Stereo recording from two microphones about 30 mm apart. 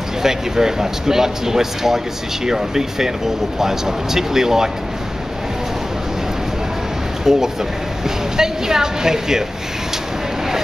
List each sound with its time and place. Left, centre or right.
0.2 s speech: centre
7.2 s speech: centre